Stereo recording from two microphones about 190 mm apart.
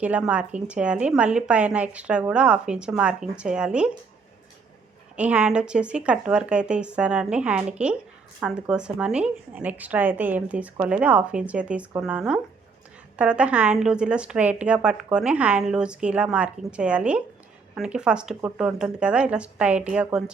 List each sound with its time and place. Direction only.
0.0 s speech: 5° right (ahead or behind)
5.1 s speech: 5° right (ahead or behind)